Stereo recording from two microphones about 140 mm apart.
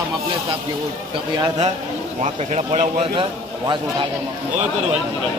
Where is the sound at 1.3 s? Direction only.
25° right (ahead or behind).